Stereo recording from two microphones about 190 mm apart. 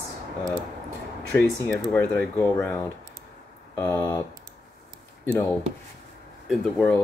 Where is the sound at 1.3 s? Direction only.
15° left (ahead or behind).